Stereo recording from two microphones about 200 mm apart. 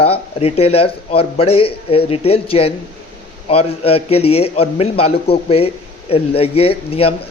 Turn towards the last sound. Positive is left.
turn(degrees=30)  # may be behind; listen again after turning